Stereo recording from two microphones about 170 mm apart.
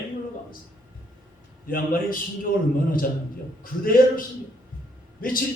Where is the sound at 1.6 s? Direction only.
60° left (ahead or behind).